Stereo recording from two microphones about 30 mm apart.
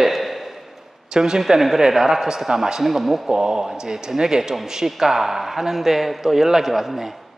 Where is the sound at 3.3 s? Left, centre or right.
Right.